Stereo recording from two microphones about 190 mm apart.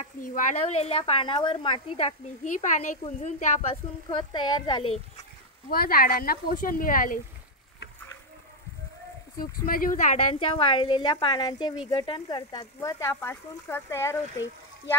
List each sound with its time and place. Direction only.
0.0 s speech: 40° left (ahead or behind)
4.1 s a woman's voice: 25° left (ahead or behind)
5.7 s speech: 50° left (ahead or behind)
9.4 s speech: 50° left (ahead or behind)
10.4 s a woman's voice: 30° left (ahead or behind)